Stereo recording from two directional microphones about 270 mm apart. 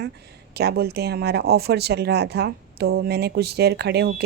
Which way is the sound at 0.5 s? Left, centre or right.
Right.